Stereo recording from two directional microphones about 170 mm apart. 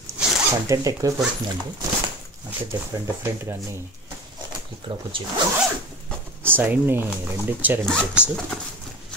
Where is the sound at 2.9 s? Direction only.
15° right (ahead or behind).